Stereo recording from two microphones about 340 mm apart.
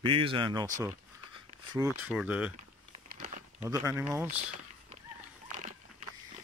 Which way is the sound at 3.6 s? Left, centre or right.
Centre.